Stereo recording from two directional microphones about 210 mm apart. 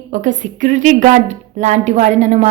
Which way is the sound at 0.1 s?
35° right (ahead or behind).